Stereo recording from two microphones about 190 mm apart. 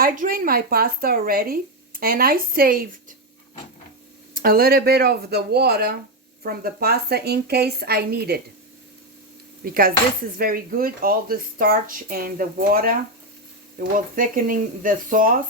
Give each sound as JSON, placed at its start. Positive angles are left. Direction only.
{"t": 0.0, "sound": "speech", "side_deg": -50}
{"t": 4.4, "sound": "speech", "side_deg": -50}
{"t": 9.6, "sound": "speech", "side_deg": -50}